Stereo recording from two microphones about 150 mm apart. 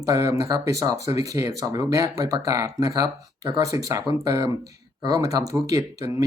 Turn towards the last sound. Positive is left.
turn(degrees=-20)  # may be behind; listen again after turning